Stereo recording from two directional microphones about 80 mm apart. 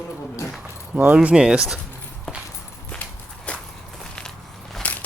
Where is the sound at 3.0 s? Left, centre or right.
Centre.